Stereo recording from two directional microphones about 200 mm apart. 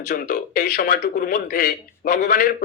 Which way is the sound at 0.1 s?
50° left (ahead or behind).